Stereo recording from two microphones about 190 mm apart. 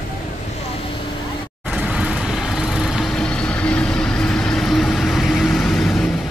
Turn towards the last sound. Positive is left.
turn(degrees=0)  # may be behind; listen again after turning